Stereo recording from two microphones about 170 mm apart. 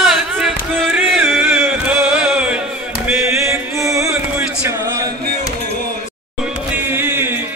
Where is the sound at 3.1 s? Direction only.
15° right (ahead or behind).